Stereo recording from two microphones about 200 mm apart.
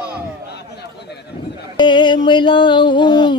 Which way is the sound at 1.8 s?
25° left (ahead or behind).